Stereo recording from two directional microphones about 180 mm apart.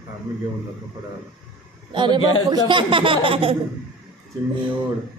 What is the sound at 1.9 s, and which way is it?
Speech, 25° right (ahead or behind).